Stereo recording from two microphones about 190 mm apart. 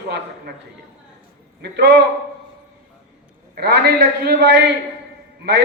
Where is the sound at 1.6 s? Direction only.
60° right (ahead or behind).